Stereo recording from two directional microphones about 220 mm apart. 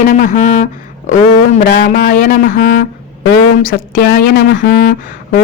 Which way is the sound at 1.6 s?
45° left (ahead or behind).